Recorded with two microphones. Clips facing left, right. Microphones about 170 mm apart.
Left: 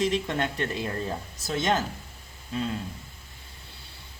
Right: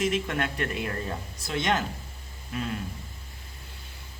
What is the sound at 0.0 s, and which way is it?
Speech, 35° left (ahead or behind).